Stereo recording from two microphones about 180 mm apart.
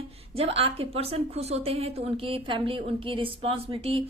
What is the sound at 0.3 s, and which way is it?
A woman's voice, 35° right (ahead or behind).